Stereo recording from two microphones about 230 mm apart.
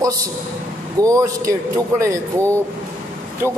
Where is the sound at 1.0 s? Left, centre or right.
Centre.